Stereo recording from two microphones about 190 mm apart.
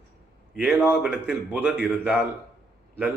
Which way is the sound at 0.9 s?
5° right (ahead or behind).